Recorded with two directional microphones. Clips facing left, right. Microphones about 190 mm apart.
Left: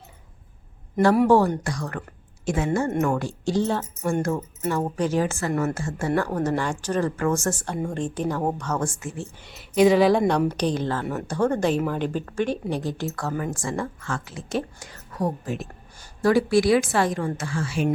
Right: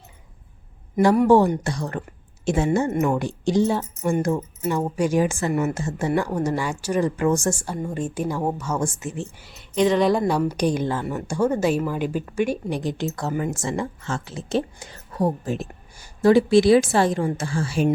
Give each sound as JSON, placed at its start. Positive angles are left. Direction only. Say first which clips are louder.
{"t": 1.3, "sound": "a woman's voice", "louder": "right 2 dB", "side_deg": -20}
{"t": 9.4, "sound": "a woman's voice", "louder": "left 3 dB", "side_deg": 0}